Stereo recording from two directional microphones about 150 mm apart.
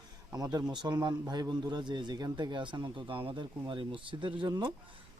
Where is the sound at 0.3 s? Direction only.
25° right (ahead or behind).